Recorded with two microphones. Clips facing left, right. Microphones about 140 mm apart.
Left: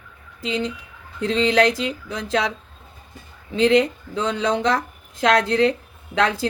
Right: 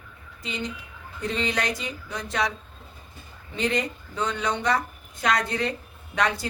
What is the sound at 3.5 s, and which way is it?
Speech, 90° left.